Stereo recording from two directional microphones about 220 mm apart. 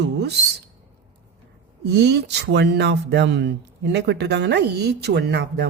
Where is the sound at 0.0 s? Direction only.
50° right (ahead or behind).